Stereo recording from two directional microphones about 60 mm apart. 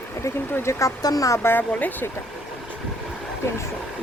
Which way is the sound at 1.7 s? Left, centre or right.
Left.